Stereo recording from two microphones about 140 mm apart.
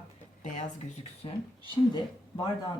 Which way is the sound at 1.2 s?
35° left (ahead or behind).